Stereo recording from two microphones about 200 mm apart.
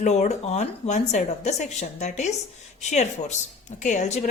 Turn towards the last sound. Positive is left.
turn(degrees=35)  # may be behind; listen again after turning